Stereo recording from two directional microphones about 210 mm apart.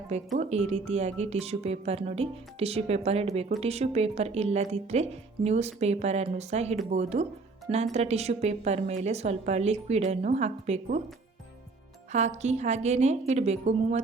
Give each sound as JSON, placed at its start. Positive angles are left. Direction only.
{"t": 0.3, "sound": "a woman's voice", "side_deg": -30}
{"t": 12.1, "sound": "a woman's voice", "side_deg": -35}